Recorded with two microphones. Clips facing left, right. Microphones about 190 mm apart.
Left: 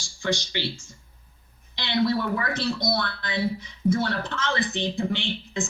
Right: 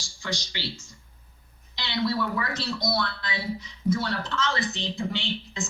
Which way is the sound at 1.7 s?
55° left (ahead or behind).